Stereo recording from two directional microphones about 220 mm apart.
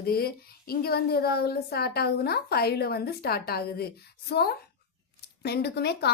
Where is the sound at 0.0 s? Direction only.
45° left (ahead or behind).